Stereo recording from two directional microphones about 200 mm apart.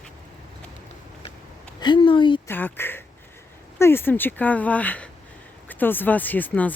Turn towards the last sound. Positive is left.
turn(degrees=10)  # may be behind; listen again after turning